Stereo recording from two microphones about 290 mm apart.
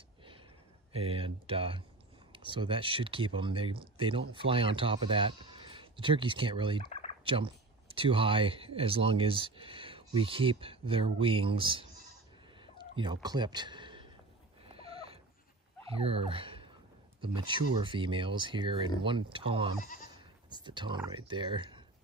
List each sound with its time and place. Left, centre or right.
0.9 s speech: centre
6.9 s a sound: left
7.2 s speech: centre
12.6 s turkey: centre
14.7 s a sound: centre
16.0 s speech: centre
19.8 s goat: left
20.6 s speech: centre